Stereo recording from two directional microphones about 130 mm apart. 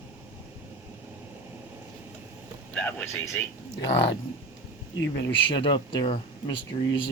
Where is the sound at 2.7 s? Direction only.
15° left (ahead or behind).